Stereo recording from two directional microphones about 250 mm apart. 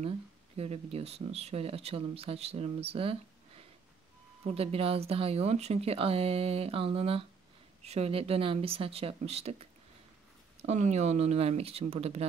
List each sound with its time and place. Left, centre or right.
0.6 s speech: right